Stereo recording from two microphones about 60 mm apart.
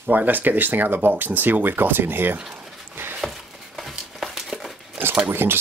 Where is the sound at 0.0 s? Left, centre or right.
Right.